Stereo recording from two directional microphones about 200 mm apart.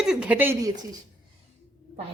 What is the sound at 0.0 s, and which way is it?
Speech, 5° right (ahead or behind).